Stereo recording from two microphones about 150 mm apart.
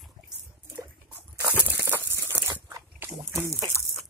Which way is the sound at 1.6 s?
15° right (ahead or behind).